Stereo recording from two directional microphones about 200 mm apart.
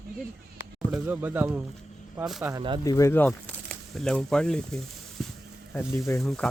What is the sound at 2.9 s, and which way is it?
Speech, 15° left (ahead or behind).